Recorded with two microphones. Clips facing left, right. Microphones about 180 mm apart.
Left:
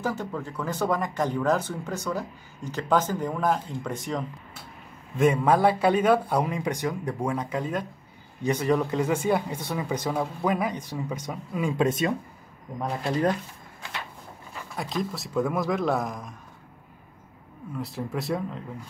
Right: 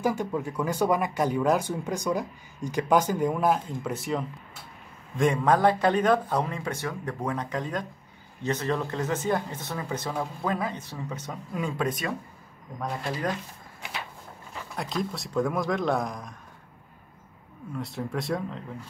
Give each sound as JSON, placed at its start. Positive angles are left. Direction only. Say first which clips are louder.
{"t": 0.0, "sound": "speech", "louder": "right 3 dB", "side_deg": -10}
{"t": 5.1, "sound": "speech", "louder": "left 2 dB", "side_deg": 5}
{"t": 11.7, "sound": "speech", "louder": "left 7 dB", "side_deg": 25}
{"t": 14.8, "sound": "a man's voice", "louder": "left 1 dB", "side_deg": 0}
{"t": 17.7, "sound": "a man's voice", "louder": "even", "side_deg": 0}